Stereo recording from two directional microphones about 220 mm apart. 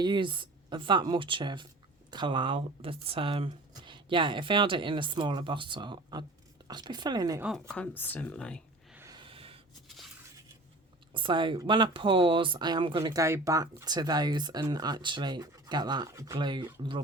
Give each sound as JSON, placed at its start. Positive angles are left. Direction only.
{"t": 0.0, "sound": "speech", "side_deg": -20}
{"t": 7.7, "sound": "speech", "side_deg": 5}
{"t": 9.0, "sound": "a sound", "side_deg": -20}
{"t": 11.1, "sound": "speech", "side_deg": -20}